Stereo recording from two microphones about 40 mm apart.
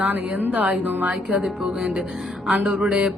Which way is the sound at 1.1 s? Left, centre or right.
Right.